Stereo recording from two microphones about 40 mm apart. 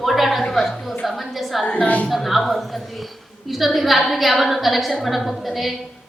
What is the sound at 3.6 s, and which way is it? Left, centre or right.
A woman's voice, centre.